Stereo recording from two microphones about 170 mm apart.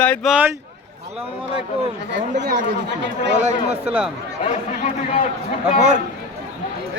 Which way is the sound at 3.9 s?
10° right (ahead or behind).